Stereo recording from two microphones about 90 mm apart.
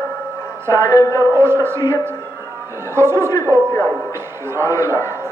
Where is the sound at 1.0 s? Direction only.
40° left (ahead or behind).